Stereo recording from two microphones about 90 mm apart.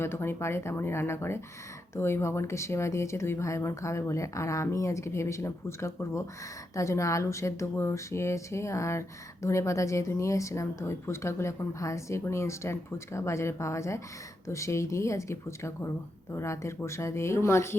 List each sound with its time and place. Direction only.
0.0 s speech: 25° left (ahead or behind)